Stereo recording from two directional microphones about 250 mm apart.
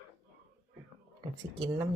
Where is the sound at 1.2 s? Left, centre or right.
Centre.